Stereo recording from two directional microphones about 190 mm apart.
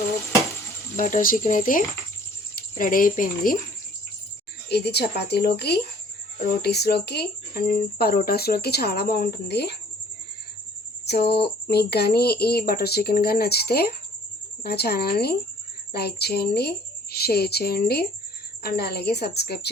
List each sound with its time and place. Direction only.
0.9 s speech: 45° left (ahead or behind)
4.7 s speech: 60° left (ahead or behind)
11.0 s speech: 60° left (ahead or behind)